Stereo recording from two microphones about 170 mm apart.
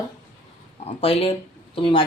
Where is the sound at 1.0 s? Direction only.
35° left (ahead or behind).